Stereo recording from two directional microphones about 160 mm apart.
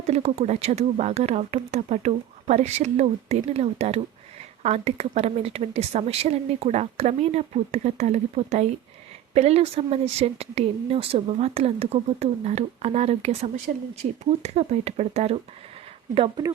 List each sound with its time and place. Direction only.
0.1 s speech: 40° right (ahead or behind)